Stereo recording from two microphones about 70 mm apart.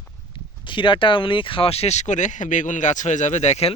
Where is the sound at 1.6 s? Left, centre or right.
Left.